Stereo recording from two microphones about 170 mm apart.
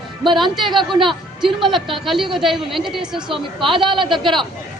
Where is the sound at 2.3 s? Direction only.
Centre (ahead or behind).